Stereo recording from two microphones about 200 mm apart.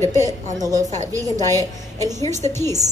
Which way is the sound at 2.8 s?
35° right (ahead or behind).